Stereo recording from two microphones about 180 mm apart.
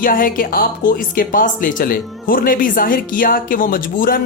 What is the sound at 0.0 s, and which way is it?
Speech, 50° left (ahead or behind).